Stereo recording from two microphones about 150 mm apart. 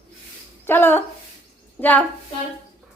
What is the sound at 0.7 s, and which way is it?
Speech, 15° left (ahead or behind).